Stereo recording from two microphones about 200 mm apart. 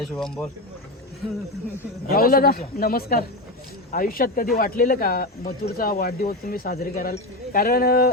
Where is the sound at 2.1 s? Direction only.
50° left (ahead or behind).